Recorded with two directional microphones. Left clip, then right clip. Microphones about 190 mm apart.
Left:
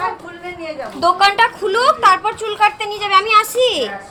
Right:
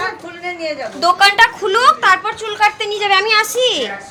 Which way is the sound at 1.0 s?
5° right (ahead or behind).